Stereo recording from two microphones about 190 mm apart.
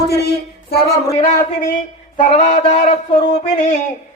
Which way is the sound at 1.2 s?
40° left (ahead or behind).